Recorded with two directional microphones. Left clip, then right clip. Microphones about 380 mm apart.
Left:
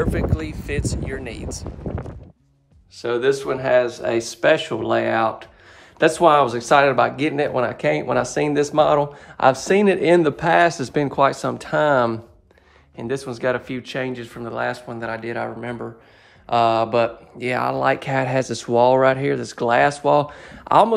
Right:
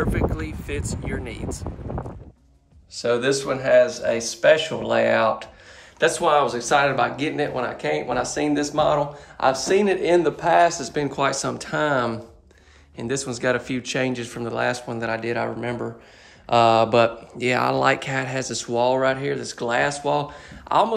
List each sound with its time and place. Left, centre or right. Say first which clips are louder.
0.0 s speech: left 1 dB; centre
3.0 s speech: left 1 dB; centre